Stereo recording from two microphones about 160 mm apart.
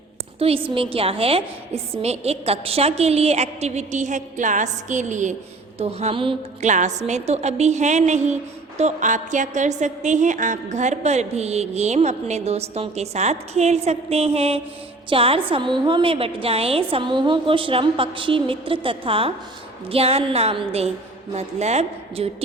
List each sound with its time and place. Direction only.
0.3 s a woman's voice: 35° right (ahead or behind)
5.8 s a woman's voice: 40° right (ahead or behind)
6.6 s a woman's voice: 45° right (ahead or behind)